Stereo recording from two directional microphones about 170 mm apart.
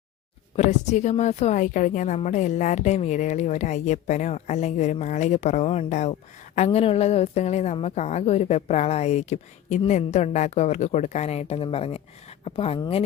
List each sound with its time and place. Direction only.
0.5 s a woman's voice: 40° left (ahead or behind)